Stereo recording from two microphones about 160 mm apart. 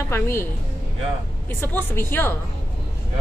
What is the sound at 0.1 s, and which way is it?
Speech, 15° left (ahead or behind).